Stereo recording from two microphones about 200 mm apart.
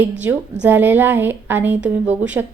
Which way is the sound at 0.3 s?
10° right (ahead or behind).